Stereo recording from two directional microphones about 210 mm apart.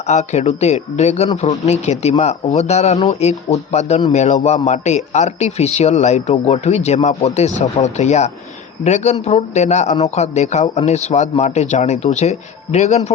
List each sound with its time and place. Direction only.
0.1 s speech: 35° left (ahead or behind)